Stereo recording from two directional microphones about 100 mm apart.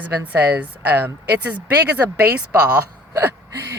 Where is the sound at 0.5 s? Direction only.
15° right (ahead or behind).